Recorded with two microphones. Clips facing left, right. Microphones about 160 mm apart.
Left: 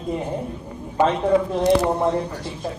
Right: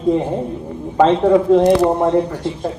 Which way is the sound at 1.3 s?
70° right (ahead or behind).